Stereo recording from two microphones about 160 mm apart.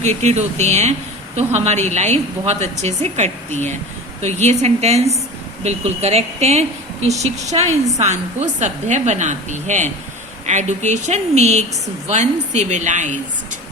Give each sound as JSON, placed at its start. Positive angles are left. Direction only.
{"t": 0.0, "sound": "a woman's voice", "side_deg": -45}